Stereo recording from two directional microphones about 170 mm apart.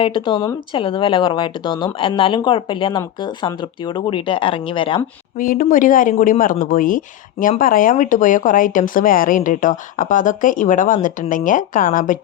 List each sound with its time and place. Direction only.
0.0 s speech: 30° left (ahead or behind)
5.4 s a woman's voice: 55° left (ahead or behind)